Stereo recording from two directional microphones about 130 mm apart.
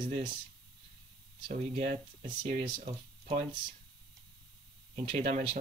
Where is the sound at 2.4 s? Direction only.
55° right (ahead or behind).